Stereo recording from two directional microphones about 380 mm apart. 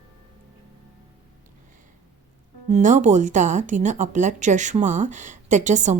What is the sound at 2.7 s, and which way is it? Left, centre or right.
Speech, centre.